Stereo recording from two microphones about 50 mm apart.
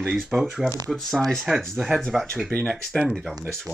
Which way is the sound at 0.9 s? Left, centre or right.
Centre.